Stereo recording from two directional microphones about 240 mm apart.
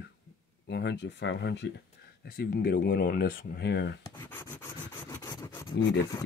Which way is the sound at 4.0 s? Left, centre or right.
Centre.